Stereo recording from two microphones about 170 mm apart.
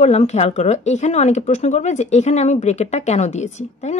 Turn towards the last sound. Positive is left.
turn(degrees=40)  # may be behind; listen again after turning